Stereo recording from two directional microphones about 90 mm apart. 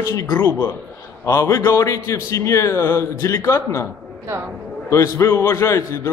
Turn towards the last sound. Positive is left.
turn(degrees=30)  # may be behind; listen again after turning